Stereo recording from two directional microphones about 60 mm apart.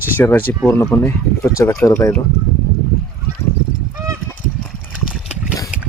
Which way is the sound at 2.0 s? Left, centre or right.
Left.